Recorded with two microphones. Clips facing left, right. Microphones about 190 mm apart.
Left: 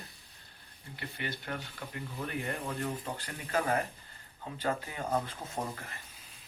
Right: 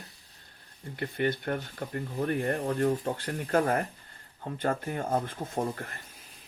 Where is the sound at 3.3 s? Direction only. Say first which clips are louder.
Right 6 dB; 60° right (ahead or behind).